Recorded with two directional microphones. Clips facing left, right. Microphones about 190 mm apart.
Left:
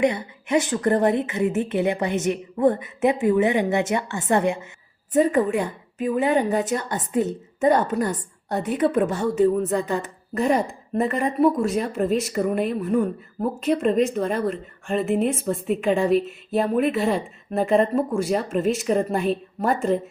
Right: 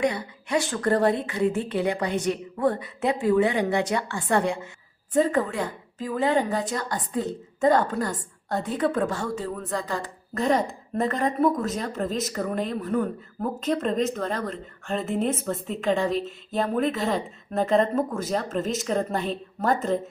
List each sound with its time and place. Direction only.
0.0 s a woman's voice: 20° left (ahead or behind)